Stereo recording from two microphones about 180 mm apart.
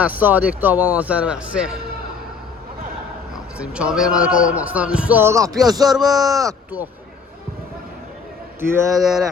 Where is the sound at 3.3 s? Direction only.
5° right (ahead or behind).